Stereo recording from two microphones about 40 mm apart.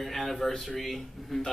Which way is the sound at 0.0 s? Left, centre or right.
Centre.